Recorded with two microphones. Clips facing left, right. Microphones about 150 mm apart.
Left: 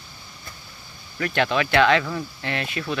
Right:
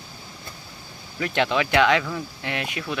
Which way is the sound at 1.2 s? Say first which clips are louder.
Even; 20° right (ahead or behind).